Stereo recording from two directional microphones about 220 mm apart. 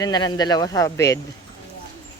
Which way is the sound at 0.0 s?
20° left (ahead or behind).